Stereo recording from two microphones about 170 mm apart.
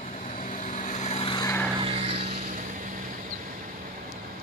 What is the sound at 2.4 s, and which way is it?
Vehicle, 50° right (ahead or behind).